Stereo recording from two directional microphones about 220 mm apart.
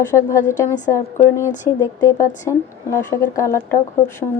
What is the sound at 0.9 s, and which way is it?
Speech, 10° left (ahead or behind).